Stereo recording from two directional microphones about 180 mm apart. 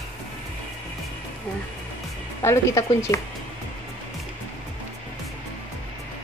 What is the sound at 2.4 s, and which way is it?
Speech, 20° left (ahead or behind).